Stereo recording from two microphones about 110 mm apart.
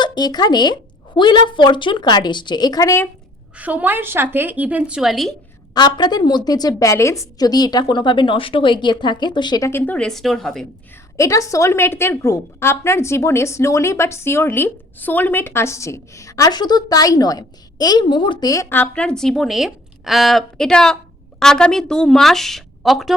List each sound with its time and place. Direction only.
0.0 s a woman's voice: 40° left (ahead or behind)
3.6 s a woman's voice: 15° right (ahead or behind)
5.7 s a woman's voice: 40° left (ahead or behind)
9.6 s speech: 20° left (ahead or behind)
10.1 s a woman's voice: centre (ahead or behind)
11.2 s a woman's voice: 30° left (ahead or behind)
18.7 s a woman's voice: 15° left (ahead or behind)